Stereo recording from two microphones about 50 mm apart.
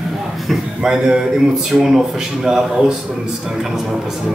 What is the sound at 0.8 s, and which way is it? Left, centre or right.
A man's voice, centre.